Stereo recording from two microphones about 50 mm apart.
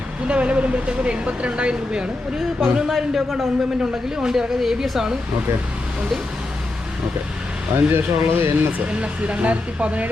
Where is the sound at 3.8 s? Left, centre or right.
Centre.